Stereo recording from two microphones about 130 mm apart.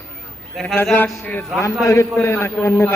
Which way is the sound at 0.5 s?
Centre (ahead or behind).